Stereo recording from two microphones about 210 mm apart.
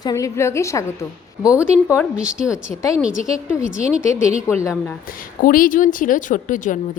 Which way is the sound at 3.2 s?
15° left (ahead or behind).